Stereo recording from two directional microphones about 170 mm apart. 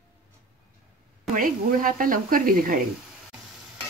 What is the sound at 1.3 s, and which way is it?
Speech, 55° right (ahead or behind).